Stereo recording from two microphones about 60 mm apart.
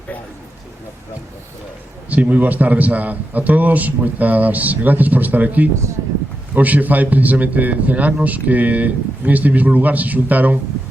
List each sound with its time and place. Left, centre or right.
2.0 s a man's voice: right